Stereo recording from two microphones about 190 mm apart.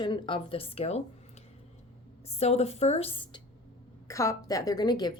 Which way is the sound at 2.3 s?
35° left (ahead or behind).